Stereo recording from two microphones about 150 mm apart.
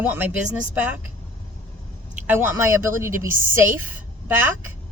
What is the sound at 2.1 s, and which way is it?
Speech, 15° right (ahead or behind).